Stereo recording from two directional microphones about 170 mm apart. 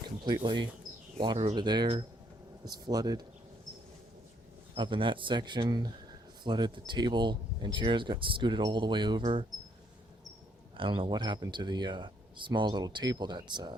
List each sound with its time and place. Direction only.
0.0 s speech: 25° right (ahead or behind)
4.7 s speech: 30° right (ahead or behind)
10.8 s speech: 30° right (ahead or behind)